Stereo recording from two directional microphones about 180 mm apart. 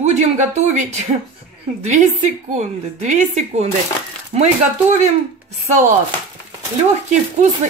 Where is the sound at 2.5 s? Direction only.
40° right (ahead or behind).